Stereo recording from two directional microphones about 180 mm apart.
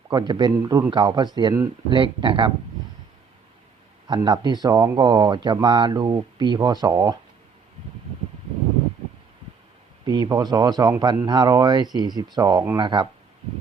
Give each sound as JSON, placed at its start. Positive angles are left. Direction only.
{"t": 0.1, "sound": "speech", "side_deg": -25}
{"t": 4.0, "sound": "speech", "side_deg": -25}
{"t": 10.1, "sound": "speech", "side_deg": -20}